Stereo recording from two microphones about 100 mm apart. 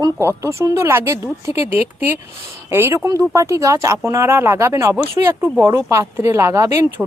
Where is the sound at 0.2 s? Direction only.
25° right (ahead or behind).